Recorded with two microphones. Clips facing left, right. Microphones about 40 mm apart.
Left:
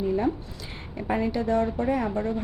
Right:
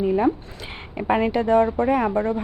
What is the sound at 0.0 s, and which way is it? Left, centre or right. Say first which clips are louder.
A woman's voice: right 5 dB; right.